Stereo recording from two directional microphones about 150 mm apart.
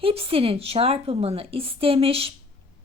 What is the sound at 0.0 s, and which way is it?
A woman's voice, 40° right (ahead or behind).